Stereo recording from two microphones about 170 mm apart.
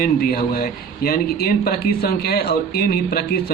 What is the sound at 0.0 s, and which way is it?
Speech, 60° left (ahead or behind).